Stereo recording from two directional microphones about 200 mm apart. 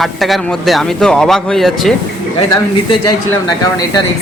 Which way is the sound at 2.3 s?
20° left (ahead or behind).